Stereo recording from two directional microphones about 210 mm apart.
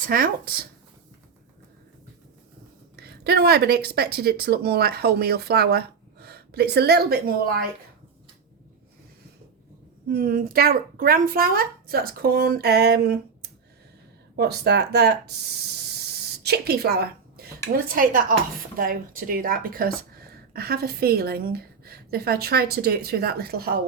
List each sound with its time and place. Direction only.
0.0 s speech: 45° right (ahead or behind)
2.9 s speech: 50° right (ahead or behind)
10.1 s speech: 45° right (ahead or behind)
16.4 s a sound: 50° right (ahead or behind)
17.7 s speech: 45° right (ahead or behind)